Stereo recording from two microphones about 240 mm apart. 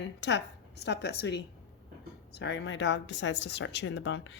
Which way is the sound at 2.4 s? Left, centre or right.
Left.